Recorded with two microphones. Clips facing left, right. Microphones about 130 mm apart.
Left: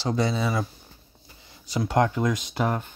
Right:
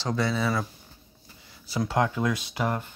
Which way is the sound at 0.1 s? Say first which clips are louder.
Left 1 dB; 20° left (ahead or behind).